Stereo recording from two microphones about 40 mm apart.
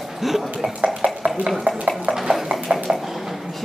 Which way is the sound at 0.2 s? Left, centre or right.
Centre.